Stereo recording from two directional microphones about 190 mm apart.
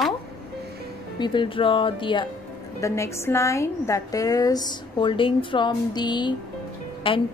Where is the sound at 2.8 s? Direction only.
15° left (ahead or behind).